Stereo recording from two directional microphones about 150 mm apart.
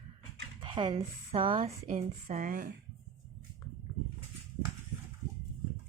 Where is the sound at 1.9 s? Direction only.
50° right (ahead or behind).